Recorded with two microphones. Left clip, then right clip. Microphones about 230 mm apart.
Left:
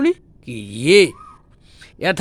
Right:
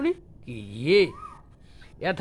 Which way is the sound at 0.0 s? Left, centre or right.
Left.